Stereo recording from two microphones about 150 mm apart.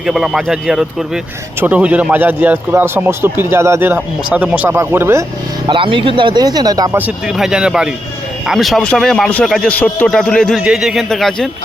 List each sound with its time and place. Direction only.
0.0 s a man's voice: 5° right (ahead or behind)
5.6 s speech: 35° right (ahead or behind)
6.9 s a man's voice: 10° right (ahead or behind)